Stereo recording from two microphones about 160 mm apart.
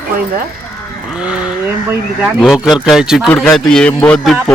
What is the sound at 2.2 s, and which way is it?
A man's voice, 5° right (ahead or behind).